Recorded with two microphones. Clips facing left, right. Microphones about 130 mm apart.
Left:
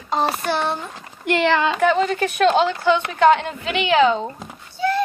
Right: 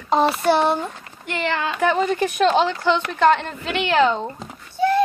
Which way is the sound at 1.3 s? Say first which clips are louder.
Left 6 dB; 90° left.